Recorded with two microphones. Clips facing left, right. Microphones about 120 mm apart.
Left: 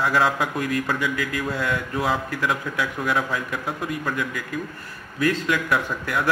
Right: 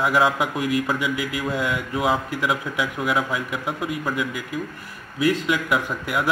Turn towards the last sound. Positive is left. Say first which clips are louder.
# right 1 dB
turn(degrees=-15)  # may be behind; listen again after turning